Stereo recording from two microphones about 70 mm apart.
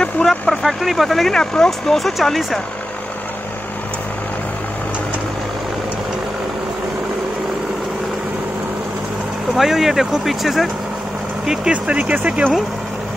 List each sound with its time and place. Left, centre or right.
0.0 s speech: centre
9.6 s speech: centre
11.7 s speech: centre